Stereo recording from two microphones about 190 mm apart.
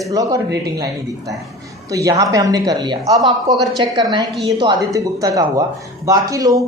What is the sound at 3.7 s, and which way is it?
A woman's voice, 20° right (ahead or behind).